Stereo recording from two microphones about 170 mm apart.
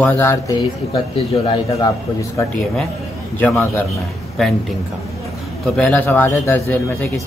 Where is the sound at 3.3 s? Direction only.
10° left (ahead or behind).